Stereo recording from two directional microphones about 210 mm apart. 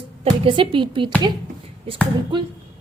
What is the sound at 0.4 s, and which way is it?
Speech, 25° right (ahead or behind).